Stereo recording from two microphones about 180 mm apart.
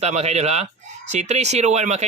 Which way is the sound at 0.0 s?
35° right (ahead or behind).